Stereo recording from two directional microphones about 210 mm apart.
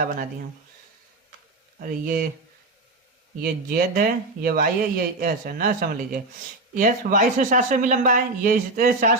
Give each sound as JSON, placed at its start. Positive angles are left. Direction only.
{"t": 1.8, "sound": "speech", "side_deg": -40}
{"t": 3.4, "sound": "speech", "side_deg": -45}